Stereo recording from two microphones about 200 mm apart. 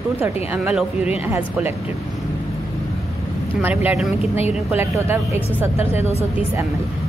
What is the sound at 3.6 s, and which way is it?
Speech, 10° right (ahead or behind).